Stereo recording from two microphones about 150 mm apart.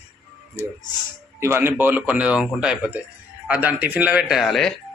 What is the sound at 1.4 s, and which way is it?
A man's voice, 15° right (ahead or behind).